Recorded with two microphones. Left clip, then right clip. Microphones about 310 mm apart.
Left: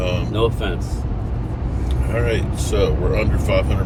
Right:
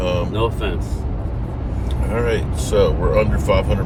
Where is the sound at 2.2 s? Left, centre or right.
Centre.